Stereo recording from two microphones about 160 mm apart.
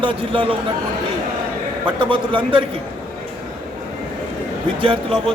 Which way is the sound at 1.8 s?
30° right (ahead or behind).